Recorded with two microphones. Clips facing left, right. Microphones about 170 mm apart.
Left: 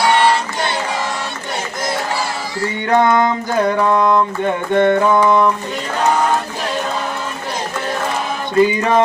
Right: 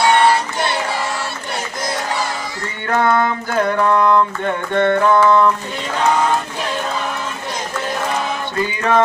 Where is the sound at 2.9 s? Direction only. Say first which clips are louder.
Left 2 dB; 15° left (ahead or behind).